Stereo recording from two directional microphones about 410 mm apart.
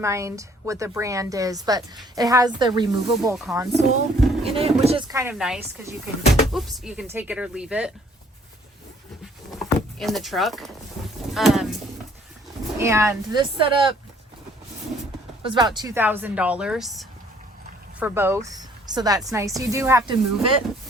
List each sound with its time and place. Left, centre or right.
0.0 s a woman's voice: centre
4.4 s a woman's voice: centre
9.5 s vehicle: centre
11.3 s speech: centre
12.8 s a woman's voice: centre
15.4 s a woman's voice: centre